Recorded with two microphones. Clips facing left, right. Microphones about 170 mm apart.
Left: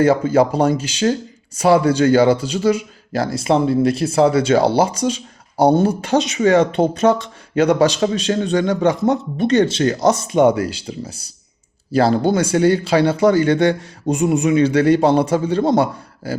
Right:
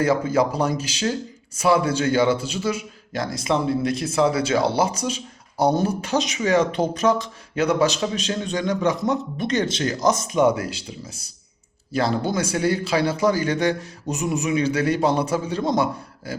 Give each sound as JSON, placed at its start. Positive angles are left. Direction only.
{"t": 0.0, "sound": "speech", "side_deg": 30}
{"t": 8.3, "sound": "speech", "side_deg": 50}
{"t": 8.8, "sound": "speech", "side_deg": 30}
{"t": 10.3, "sound": "speech", "side_deg": 65}
{"t": 11.9, "sound": "speech", "side_deg": 30}